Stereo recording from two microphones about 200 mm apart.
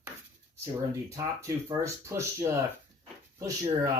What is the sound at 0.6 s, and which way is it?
Speech, 15° right (ahead or behind).